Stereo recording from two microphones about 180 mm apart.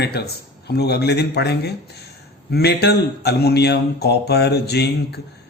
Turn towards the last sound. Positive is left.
turn(degrees=65)  # may be behind; listen again after turning